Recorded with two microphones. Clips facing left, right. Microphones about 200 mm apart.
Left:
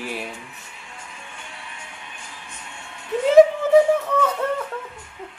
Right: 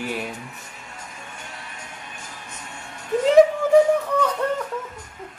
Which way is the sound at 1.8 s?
40° right (ahead or behind).